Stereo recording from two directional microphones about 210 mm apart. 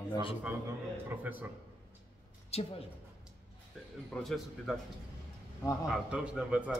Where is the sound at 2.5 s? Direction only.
30° left (ahead or behind).